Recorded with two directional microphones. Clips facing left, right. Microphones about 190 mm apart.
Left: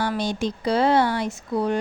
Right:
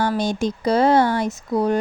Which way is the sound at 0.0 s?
45° right (ahead or behind).